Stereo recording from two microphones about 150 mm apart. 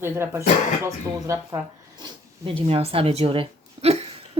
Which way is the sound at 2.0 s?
40° right (ahead or behind).